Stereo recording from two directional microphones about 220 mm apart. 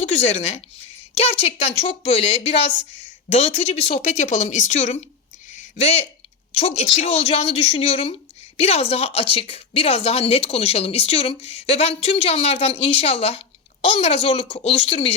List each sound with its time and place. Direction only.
0.0 s a woman's voice: 30° left (ahead or behind)